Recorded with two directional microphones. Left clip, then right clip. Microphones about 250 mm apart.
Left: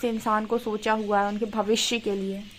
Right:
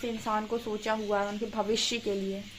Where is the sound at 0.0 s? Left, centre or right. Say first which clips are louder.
Left 6 dB; left.